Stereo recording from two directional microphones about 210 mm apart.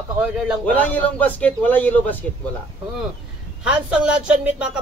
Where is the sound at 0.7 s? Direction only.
5° left (ahead or behind).